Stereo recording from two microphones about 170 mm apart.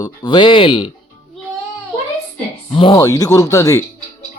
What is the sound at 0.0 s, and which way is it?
Speech, 25° left (ahead or behind).